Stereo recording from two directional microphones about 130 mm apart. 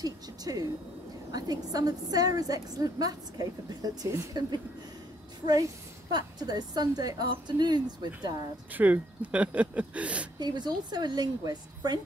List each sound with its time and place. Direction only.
0.0 s a woman's voice: 30° right (ahead or behind)
6.1 s a woman's voice: 30° right (ahead or behind)
8.7 s speech: 10° right (ahead or behind)
10.4 s a woman's voice: 35° right (ahead or behind)